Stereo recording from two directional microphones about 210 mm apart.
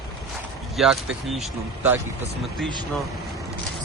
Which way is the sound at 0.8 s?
Centre (ahead or behind).